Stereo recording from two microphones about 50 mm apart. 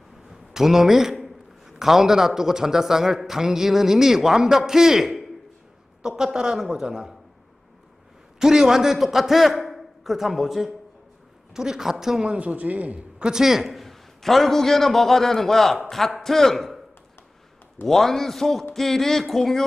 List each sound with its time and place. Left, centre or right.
0.3 s a man's voice: centre
8.4 s a man's voice: centre
12.3 s a man's voice: right
13.2 s a man's voice: centre
17.8 s a man's voice: centre